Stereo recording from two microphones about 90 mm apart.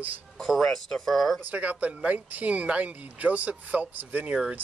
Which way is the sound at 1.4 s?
15° right (ahead or behind).